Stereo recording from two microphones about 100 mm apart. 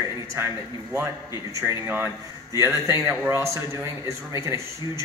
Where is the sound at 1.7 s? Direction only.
20° right (ahead or behind).